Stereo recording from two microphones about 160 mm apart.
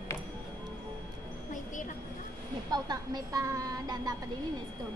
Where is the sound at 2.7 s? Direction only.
25° right (ahead or behind).